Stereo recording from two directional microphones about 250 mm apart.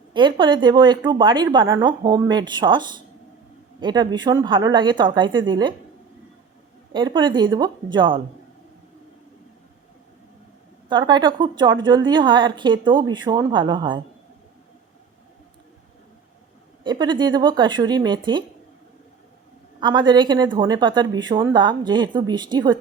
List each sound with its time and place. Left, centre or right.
0.1 s a woman's voice: centre
6.9 s a woman's voice: centre
10.8 s a woman's voice: centre
16.8 s a woman's voice: centre
19.8 s a woman's voice: centre